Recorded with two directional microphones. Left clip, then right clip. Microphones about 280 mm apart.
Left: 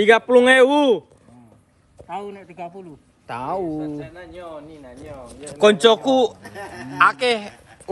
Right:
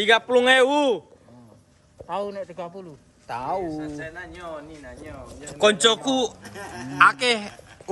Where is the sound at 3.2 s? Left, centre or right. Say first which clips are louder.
Left 2 dB; left.